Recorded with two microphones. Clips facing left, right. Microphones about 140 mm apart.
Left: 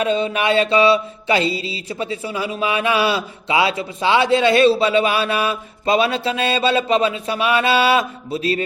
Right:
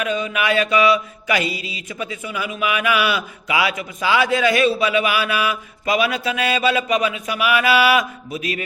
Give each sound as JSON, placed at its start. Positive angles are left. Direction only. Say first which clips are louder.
{"t": 0.0, "sound": "mantra", "louder": "left 3 dB", "side_deg": 30}